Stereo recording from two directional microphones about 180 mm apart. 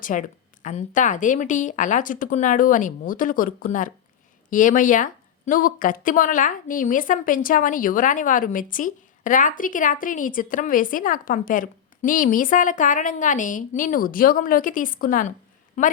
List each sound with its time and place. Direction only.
0.0 s a woman's voice: 45° left (ahead or behind)